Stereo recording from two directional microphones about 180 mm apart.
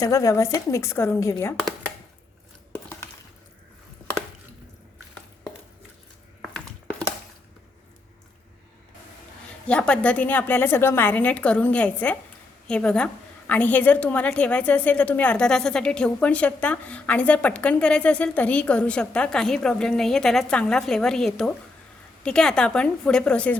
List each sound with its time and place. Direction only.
0.0 s a woman's voice: 20° left (ahead or behind)
9.6 s a woman's voice: 5° left (ahead or behind)